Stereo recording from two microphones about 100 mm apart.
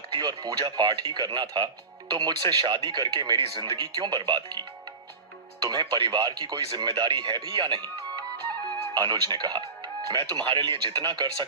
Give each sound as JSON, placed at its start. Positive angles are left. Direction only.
{"t": 0.1, "sound": "speech", "side_deg": -50}
{"t": 5.6, "sound": "speech", "side_deg": -50}